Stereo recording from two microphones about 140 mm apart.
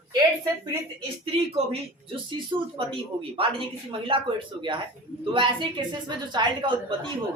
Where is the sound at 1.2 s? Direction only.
45° right (ahead or behind).